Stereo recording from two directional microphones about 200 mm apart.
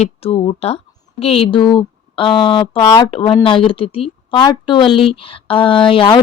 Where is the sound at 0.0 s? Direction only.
30° left (ahead or behind).